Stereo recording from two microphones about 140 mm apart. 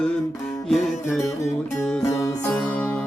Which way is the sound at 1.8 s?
15° left (ahead or behind).